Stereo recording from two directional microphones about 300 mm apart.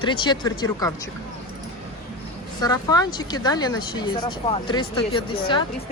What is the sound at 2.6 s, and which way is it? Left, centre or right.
Speech, centre.